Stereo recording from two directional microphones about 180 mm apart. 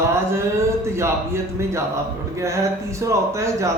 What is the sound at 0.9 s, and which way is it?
Speech, 15° right (ahead or behind).